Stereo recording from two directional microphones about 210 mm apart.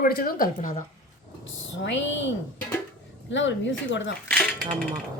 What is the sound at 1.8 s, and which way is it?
Speech, 60° left (ahead or behind).